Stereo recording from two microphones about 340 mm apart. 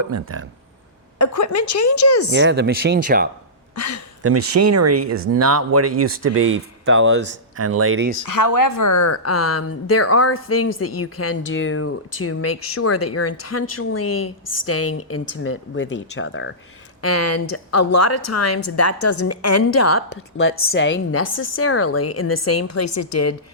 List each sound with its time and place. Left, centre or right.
0.0 s speech: right
1.2 s a woman's voice: left
2.3 s speech: right
3.8 s a woman's voice: left
4.2 s speech: right
4.6 s speech: right
6.8 s speech: right
7.6 s speech: right
8.2 s speech: left
17.0 s a woman's voice: left